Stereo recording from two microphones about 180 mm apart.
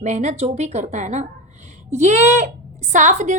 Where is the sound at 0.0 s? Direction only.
40° right (ahead or behind).